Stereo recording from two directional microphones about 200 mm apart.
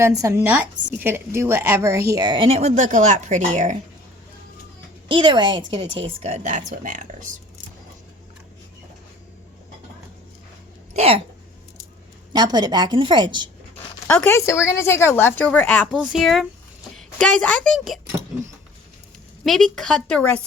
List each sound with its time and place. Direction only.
0.0 s a woman's voice: 15° right (ahead or behind); by 3.8 s 40° right (ahead or behind)
5.0 s a woman's voice: 25° right (ahead or behind)
6.1 s speech: 35° right (ahead or behind)
10.9 s speech: 30° right (ahead or behind)
12.3 s a woman's voice: 20° right (ahead or behind)
14.1 s a woman's voice: 10° left (ahead or behind)
19.5 s a woman's voice: centre (ahead or behind)